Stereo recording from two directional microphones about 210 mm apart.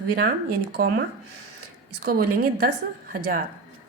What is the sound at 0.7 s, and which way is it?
A woman's voice, 45° right (ahead or behind).